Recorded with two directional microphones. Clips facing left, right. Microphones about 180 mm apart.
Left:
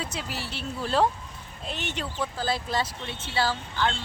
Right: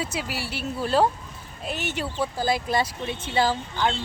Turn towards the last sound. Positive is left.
turn(degrees=-15)  # may be behind; listen again after turning